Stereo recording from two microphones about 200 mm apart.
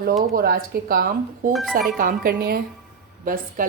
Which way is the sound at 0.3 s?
50° right (ahead or behind).